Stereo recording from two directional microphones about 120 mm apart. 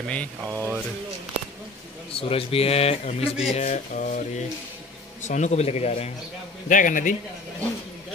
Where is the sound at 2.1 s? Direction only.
50° left (ahead or behind); by 4.4 s 90° left.